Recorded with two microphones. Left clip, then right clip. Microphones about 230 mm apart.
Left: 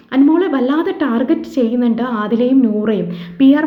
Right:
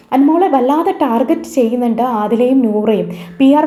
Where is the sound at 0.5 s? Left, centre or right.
Centre.